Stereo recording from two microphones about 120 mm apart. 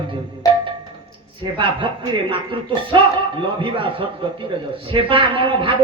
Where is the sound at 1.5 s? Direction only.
45° right (ahead or behind).